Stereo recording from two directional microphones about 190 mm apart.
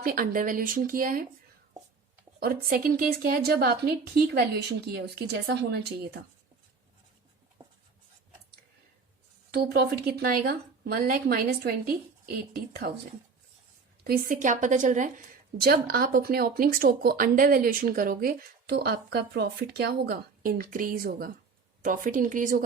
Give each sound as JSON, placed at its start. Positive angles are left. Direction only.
{"t": 0.0, "sound": "speech", "side_deg": -50}
{"t": 2.4, "sound": "speech", "side_deg": -50}
{"t": 5.3, "sound": "speech", "side_deg": -60}
{"t": 7.6, "sound": "writing", "side_deg": -25}
{"t": 9.5, "sound": "speech", "side_deg": -55}
{"t": 14.0, "sound": "a woman's voice", "side_deg": -50}
{"t": 15.6, "sound": "speech", "side_deg": -50}